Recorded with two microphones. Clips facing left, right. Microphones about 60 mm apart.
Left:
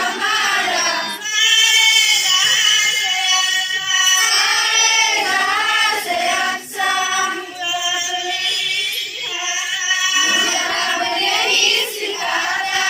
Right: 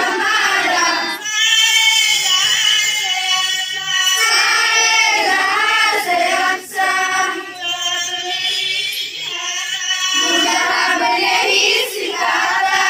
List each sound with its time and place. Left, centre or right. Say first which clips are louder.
0.0 s carnatic music: right 3 dB; right
1.4 s music: even; centre
4.2 s child singing: right 3 dB; right
10.2 s choir: right 3 dB; centre
10.4 s music: right 4 dB; right
12.2 s choir: right 5 dB; right